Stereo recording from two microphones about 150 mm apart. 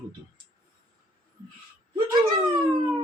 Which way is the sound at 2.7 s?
30° right (ahead or behind).